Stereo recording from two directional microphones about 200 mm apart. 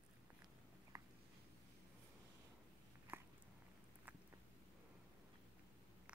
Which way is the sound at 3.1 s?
10° right (ahead or behind).